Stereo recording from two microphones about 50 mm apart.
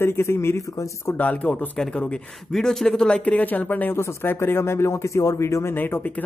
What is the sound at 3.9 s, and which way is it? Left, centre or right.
Speech, left.